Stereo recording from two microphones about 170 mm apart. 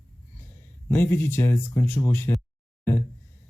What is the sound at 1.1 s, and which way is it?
Speech, 15° left (ahead or behind).